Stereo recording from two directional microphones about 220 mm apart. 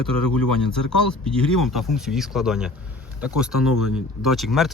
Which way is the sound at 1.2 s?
Centre (ahead or behind).